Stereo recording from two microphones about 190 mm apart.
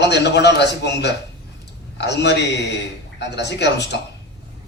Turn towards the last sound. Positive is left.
turn(degrees=65)  # may be behind; listen again after turning